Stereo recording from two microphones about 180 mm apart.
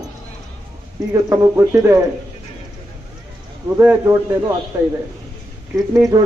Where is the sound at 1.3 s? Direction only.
15° right (ahead or behind).